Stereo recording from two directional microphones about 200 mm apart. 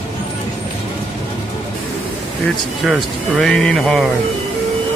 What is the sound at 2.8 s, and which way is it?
Speech, centre (ahead or behind).